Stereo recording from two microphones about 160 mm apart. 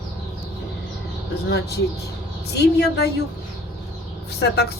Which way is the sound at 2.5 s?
90° left.